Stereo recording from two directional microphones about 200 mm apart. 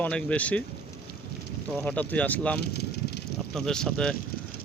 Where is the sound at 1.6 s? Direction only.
5° left (ahead or behind).